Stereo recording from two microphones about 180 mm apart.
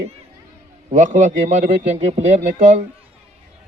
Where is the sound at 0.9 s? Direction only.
45° right (ahead or behind).